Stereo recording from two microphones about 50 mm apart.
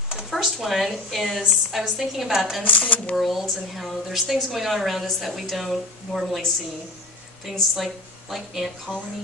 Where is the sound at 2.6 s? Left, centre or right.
Left.